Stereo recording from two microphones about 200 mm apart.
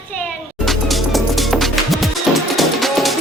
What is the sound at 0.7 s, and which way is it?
Music, centre (ahead or behind).